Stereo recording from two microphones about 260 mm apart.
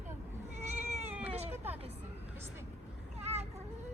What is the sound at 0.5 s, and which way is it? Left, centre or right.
Cat, right.